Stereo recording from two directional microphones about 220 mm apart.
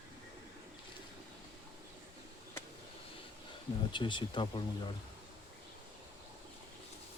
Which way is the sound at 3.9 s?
20° left (ahead or behind).